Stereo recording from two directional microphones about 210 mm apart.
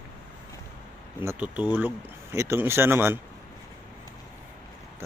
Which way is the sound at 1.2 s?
10° right (ahead or behind).